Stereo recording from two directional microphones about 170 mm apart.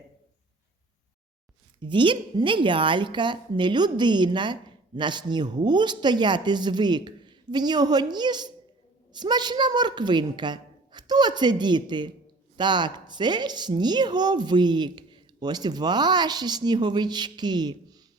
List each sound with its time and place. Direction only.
1.8 s speech: 30° right (ahead or behind)